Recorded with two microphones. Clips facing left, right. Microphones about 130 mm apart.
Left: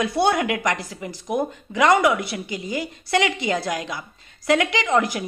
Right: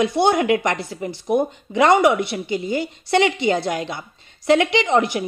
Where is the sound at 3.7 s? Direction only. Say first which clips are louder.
Right 3 dB; 30° right (ahead or behind).